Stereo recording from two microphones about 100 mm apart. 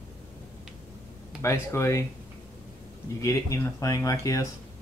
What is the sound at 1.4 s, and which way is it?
Speech, 25° left (ahead or behind).